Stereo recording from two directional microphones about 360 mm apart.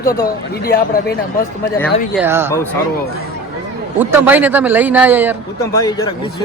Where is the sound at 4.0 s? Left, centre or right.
Centre.